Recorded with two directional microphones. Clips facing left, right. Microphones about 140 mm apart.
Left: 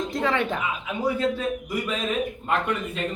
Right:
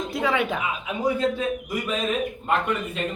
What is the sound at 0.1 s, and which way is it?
Speech, 5° right (ahead or behind).